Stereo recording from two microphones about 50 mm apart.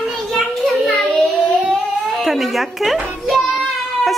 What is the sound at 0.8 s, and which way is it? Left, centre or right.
Child singing, centre.